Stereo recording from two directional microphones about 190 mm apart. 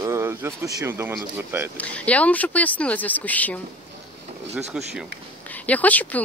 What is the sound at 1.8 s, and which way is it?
Speech, 5° left (ahead or behind).